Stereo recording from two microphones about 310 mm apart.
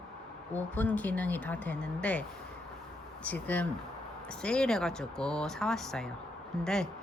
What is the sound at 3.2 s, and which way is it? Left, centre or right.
Speech, centre.